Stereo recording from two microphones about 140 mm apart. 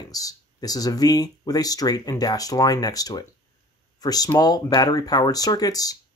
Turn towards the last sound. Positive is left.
turn(degrees=25)  # may be behind; listen again after turning